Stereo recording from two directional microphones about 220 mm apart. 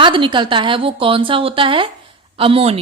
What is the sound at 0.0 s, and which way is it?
Speech, 20° right (ahead or behind).